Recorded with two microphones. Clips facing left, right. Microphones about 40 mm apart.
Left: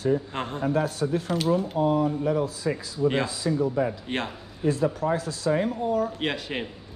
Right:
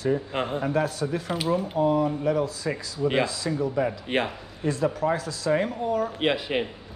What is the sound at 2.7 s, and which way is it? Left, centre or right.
Speech, centre.